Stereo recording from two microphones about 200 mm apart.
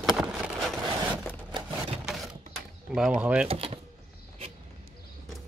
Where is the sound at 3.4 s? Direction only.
30° right (ahead or behind).